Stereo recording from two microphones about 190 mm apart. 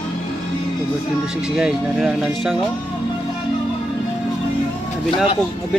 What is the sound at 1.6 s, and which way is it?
Speech, 5° right (ahead or behind).